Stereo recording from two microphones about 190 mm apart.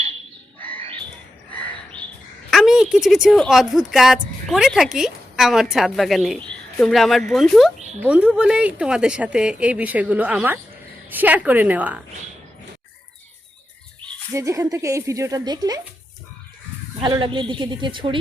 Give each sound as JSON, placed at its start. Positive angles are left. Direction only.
{"t": 1.5, "sound": "a sound", "side_deg": 5}
{"t": 2.5, "sound": "speech", "side_deg": 0}
{"t": 7.8, "sound": "a sound", "side_deg": -35}
{"t": 8.0, "sound": "a woman's voice", "side_deg": -5}
{"t": 14.3, "sound": "a woman's voice", "side_deg": -15}
{"t": 17.0, "sound": "a woman's voice", "side_deg": -25}